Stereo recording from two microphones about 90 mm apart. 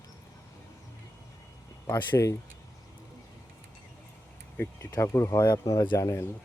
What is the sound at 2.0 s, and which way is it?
Speech, 30° left (ahead or behind).